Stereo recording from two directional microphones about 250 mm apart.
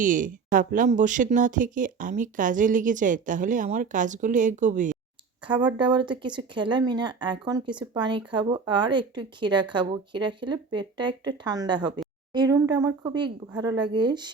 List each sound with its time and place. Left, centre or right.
0.0 s speech: right
5.5 s speech: centre